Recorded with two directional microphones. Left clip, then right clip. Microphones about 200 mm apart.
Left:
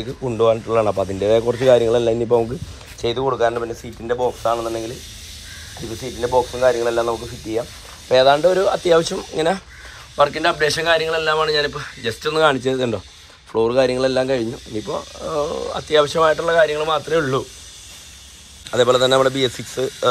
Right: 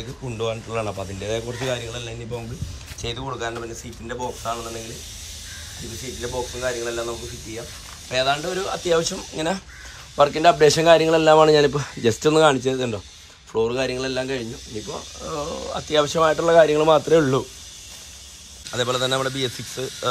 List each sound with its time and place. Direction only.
0.0 s speech: 10° right (ahead or behind)
6.2 s speech: centre (ahead or behind)
8.1 s speech: 5° right (ahead or behind)
10.1 s a man's voice: 25° right (ahead or behind)
12.4 s speech: 20° right (ahead or behind); by 17.2 s 35° right (ahead or behind)
17.2 s speech: 20° right (ahead or behind)
18.7 s speech: 10° right (ahead or behind)